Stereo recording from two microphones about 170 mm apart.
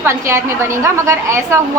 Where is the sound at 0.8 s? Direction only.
15° right (ahead or behind).